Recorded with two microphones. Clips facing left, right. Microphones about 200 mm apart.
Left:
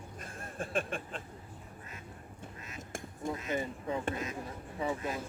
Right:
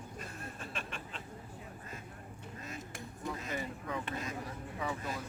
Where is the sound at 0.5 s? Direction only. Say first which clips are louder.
Left 14 dB; 50° left (ahead or behind).